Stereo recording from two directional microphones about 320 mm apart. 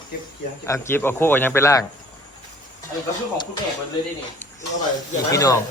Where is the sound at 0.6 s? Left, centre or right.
Centre.